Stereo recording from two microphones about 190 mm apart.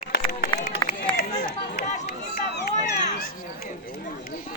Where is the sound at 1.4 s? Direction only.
55° left (ahead or behind).